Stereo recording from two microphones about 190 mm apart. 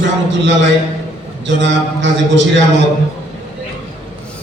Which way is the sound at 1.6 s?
70° right (ahead or behind).